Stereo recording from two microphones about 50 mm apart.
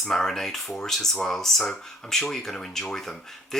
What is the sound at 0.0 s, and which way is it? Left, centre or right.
Speech, centre.